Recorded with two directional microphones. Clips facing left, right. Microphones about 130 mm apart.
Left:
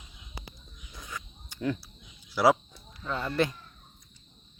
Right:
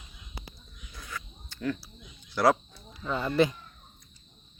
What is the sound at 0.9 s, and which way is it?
Cricket, 15° left (ahead or behind).